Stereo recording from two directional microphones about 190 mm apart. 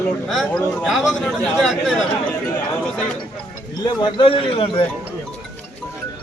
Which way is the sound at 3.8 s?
30° left (ahead or behind).